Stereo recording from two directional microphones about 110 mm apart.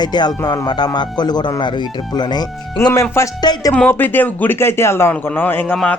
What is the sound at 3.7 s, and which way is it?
Speech, 15° left (ahead or behind).